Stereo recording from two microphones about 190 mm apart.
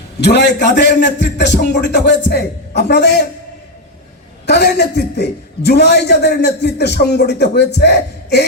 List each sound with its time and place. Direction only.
0.2 s a man's voice: 65° left (ahead or behind)
4.4 s a man's voice: 60° left (ahead or behind)